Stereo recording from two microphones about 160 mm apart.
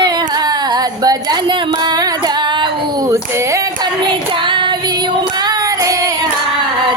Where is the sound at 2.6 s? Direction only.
20° right (ahead or behind).